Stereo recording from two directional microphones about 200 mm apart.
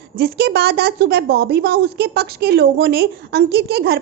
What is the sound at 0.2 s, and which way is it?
A woman's voice, 50° right (ahead or behind).